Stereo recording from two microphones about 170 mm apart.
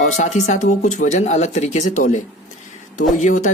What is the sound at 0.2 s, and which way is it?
Speech, 40° left (ahead or behind).